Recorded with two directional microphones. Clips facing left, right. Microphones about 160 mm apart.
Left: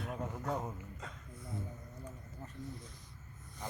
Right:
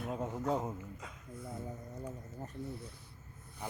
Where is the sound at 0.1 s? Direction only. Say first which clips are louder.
Right 5 dB; 25° right (ahead or behind).